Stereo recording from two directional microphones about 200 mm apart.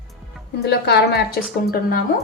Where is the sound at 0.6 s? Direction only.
55° left (ahead or behind).